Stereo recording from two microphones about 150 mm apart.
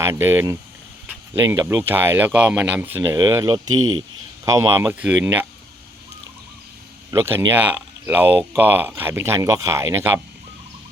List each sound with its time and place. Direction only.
0.0 s speech: 15° right (ahead or behind)
1.0 s a sound: 15° right (ahead or behind)
1.7 s speech: 15° right (ahead or behind)
7.1 s speech: 15° right (ahead or behind)